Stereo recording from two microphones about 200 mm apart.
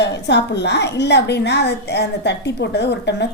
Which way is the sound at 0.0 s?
60° left (ahead or behind).